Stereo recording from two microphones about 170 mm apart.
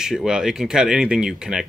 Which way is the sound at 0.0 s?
5° right (ahead or behind).